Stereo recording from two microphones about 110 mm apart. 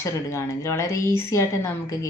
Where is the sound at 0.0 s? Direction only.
25° left (ahead or behind).